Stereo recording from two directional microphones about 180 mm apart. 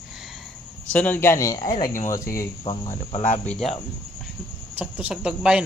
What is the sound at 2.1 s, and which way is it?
Speech, 15° left (ahead or behind).